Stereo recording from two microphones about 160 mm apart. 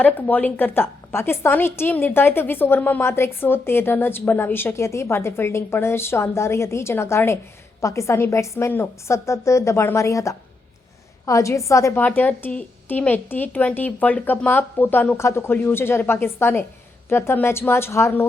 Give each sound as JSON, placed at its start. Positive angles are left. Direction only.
{"t": 0.0, "sound": "a woman's voice", "side_deg": 10}